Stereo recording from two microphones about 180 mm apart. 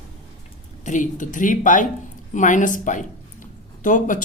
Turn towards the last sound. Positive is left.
turn(degrees=45)  # may be behind; listen again after turning